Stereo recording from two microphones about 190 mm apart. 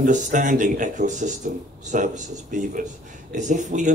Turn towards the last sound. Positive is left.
turn(degrees=-40)  # may be behind; listen again after turning